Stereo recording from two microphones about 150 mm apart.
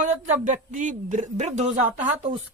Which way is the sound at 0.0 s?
55° right (ahead or behind).